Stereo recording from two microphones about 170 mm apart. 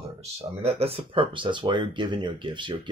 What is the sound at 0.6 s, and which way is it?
Speech, 35° right (ahead or behind).